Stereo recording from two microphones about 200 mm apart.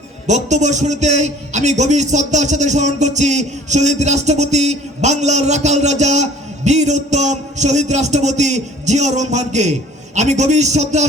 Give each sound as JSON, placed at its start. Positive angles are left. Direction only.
{"t": 0.3, "sound": "a man's voice", "side_deg": -35}